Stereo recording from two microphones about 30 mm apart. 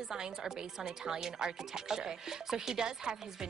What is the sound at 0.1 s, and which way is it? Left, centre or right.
Speech, centre.